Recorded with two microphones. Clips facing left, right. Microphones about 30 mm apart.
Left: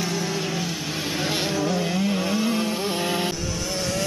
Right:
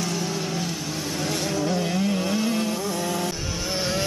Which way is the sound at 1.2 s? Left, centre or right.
Left.